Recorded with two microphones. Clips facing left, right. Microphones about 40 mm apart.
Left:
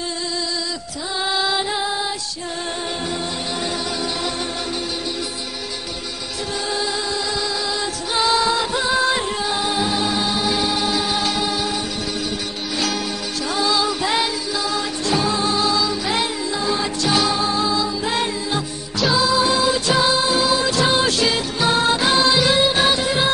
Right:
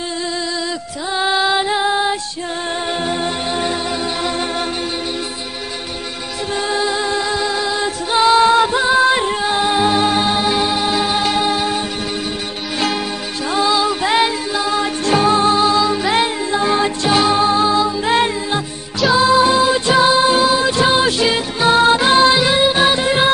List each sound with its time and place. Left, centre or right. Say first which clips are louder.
1.1 s music: right 5 dB; right
3.6 s music: right 4 dB; right
6.7 s music: right 6 dB; right
20.6 s music: right 4 dB; right
21.6 s music: right 6 dB; right
22.4 s music: right 3 dB; centre
23.0 s music: right 5 dB; right